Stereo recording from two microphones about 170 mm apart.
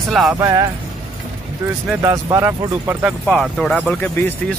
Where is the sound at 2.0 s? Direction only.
20° right (ahead or behind).